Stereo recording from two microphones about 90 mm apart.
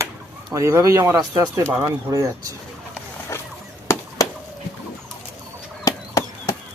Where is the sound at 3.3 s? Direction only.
30° left (ahead or behind).